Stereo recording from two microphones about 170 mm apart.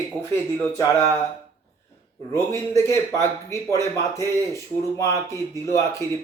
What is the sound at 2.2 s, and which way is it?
Speech, 15° left (ahead or behind).